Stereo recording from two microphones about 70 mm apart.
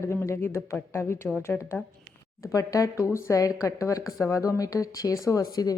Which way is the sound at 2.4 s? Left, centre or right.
Left.